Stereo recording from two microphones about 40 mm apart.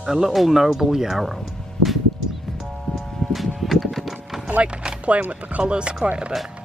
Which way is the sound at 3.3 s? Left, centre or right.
Centre.